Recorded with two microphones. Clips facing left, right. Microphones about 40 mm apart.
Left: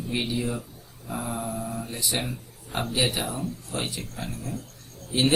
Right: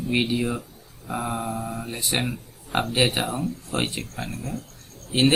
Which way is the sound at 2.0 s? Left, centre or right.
Right.